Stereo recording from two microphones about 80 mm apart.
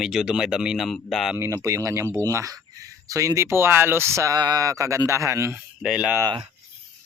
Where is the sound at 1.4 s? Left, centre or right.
Right.